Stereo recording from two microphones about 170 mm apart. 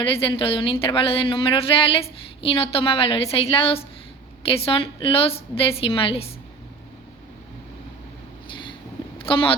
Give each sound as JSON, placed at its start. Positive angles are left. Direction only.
{"t": 0.0, "sound": "speech", "side_deg": 30}
{"t": 8.4, "sound": "a sound", "side_deg": 30}
{"t": 9.1, "sound": "speech", "side_deg": 30}